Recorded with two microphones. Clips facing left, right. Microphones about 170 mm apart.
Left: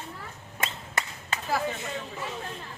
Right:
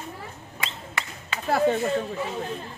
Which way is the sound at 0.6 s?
40° left (ahead or behind).